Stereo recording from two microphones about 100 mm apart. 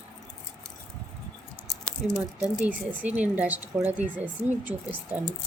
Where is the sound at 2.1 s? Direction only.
15° right (ahead or behind).